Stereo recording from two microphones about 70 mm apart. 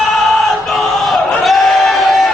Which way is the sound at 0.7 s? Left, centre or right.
Centre.